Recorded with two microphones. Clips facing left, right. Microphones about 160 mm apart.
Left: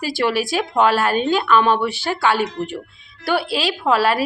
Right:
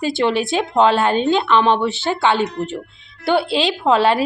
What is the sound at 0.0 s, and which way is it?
A woman's voice, 25° right (ahead or behind).